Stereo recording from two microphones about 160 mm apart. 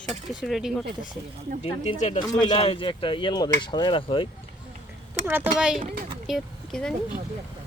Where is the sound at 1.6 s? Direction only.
40° left (ahead or behind).